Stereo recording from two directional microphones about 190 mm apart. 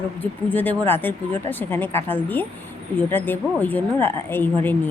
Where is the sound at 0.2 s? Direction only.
10° left (ahead or behind).